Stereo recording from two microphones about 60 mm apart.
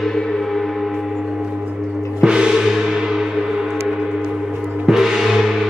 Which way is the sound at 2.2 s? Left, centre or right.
Centre.